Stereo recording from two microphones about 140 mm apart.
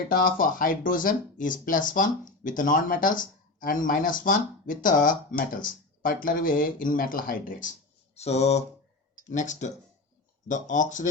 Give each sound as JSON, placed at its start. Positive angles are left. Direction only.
{"t": 0.1, "sound": "speech", "side_deg": 90}
{"t": 8.1, "sound": "a sound", "side_deg": 50}
{"t": 9.2, "sound": "speech", "side_deg": 65}